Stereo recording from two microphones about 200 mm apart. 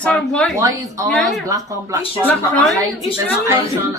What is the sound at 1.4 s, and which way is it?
Speech, 15° right (ahead or behind).